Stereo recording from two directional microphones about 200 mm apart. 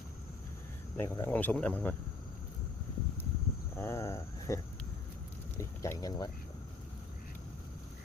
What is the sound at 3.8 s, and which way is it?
Cricket, 15° left (ahead or behind).